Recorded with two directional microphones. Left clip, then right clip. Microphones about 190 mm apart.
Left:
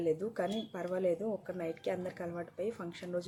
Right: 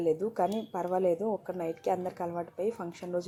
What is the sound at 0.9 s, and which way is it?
Speech, 5° left (ahead or behind).